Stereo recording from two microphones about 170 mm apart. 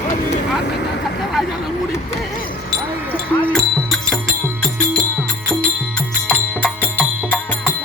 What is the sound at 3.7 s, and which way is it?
Music, 5° left (ahead or behind).